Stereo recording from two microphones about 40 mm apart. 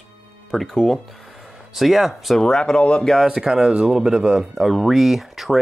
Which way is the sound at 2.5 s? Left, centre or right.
Left.